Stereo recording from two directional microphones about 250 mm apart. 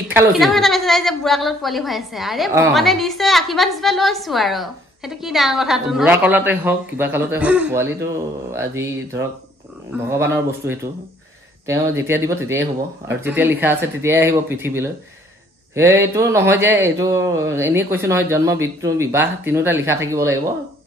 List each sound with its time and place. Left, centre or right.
0.1 s a woman's voice: centre